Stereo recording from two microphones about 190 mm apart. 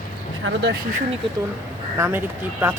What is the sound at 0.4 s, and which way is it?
Speech, 65° right (ahead or behind).